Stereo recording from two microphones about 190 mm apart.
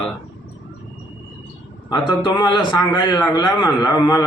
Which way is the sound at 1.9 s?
25° left (ahead or behind).